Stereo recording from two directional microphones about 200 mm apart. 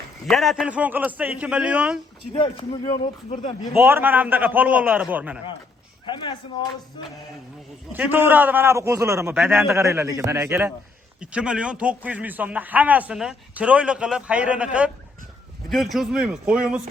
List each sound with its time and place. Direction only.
0.3 s a man's voice: centre (ahead or behind)
2.3 s speech: 25° left (ahead or behind)
3.8 s a man's voice: 10° right (ahead or behind)
7.9 s a man's voice: 10° right (ahead or behind)